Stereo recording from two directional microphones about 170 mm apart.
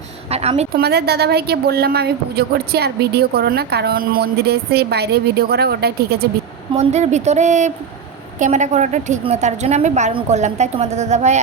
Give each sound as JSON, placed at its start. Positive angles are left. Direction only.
{"t": 0.3, "sound": "a sound", "side_deg": -35}
{"t": 0.8, "sound": "a woman's voice", "side_deg": -70}
{"t": 6.7, "sound": "a woman's voice", "side_deg": -40}